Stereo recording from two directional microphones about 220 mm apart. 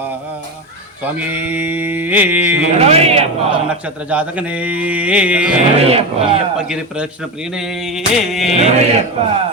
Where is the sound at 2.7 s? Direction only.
30° right (ahead or behind).